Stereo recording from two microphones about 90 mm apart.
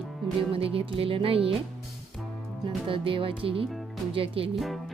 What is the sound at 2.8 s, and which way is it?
Speech, 80° right.